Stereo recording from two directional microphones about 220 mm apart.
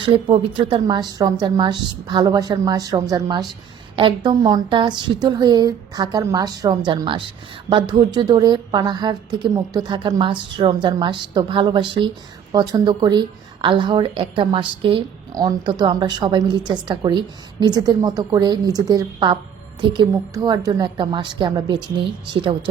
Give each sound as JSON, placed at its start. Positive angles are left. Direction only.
{"t": 0.0, "sound": "a woman's voice", "side_deg": -25}